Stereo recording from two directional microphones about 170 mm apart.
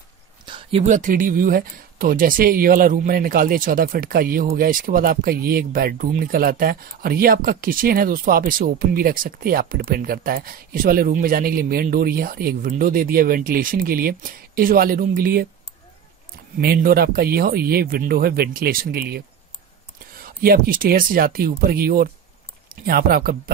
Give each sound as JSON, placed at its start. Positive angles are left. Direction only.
{"t": 0.5, "sound": "a sound", "side_deg": -30}
{"t": 0.8, "sound": "speech", "side_deg": -50}
{"t": 16.5, "sound": "speech", "side_deg": -60}